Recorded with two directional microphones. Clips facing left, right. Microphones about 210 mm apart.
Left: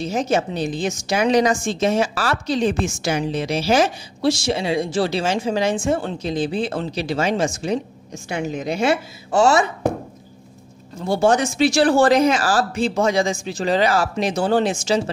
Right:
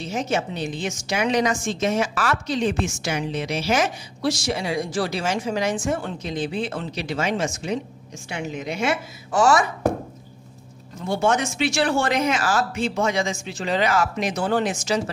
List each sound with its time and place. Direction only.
0.0 s a woman's voice: 35° left (ahead or behind)
11.1 s a woman's voice: 35° left (ahead or behind)